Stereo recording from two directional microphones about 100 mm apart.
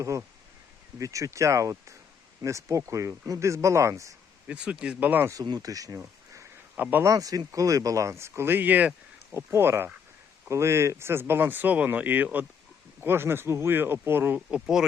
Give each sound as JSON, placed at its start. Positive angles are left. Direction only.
{"t": 0.9, "sound": "speech", "side_deg": -35}
{"t": 4.4, "sound": "speech", "side_deg": -10}
{"t": 5.3, "sound": "speech", "side_deg": -40}
{"t": 14.5, "sound": "speech", "side_deg": -5}